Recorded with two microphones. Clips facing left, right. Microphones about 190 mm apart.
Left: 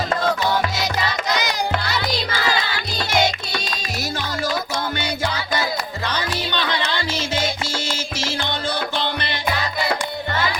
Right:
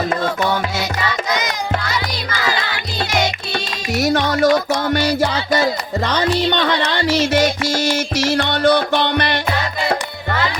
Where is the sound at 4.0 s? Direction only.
70° right (ahead or behind).